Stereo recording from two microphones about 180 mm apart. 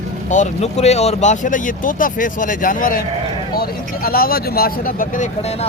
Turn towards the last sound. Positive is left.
turn(degrees=45)  # may be behind; listen again after turning